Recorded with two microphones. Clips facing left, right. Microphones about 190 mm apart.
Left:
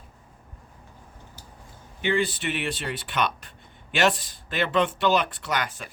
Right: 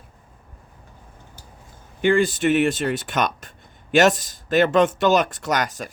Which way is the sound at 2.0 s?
45° right (ahead or behind).